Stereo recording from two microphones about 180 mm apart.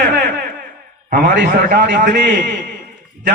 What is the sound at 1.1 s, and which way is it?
A man's voice, 50° right (ahead or behind).